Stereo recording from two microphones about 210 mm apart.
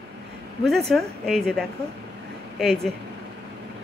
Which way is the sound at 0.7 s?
Centre (ahead or behind).